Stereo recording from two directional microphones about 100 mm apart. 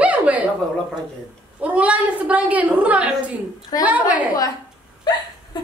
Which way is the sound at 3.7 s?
40° left (ahead or behind).